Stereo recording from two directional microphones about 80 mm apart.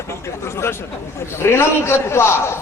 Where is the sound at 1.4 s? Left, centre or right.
Left.